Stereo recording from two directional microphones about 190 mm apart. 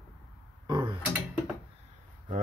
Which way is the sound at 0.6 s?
25° right (ahead or behind).